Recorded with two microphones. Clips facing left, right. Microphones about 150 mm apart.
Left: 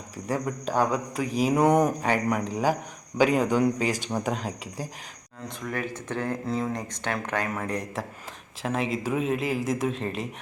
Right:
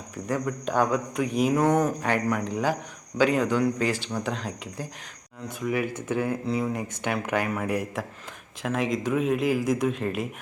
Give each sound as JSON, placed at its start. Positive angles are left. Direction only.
{"t": 0.3, "sound": "speech", "side_deg": 10}
{"t": 1.5, "sound": "speech", "side_deg": 15}
{"t": 5.5, "sound": "speech", "side_deg": -10}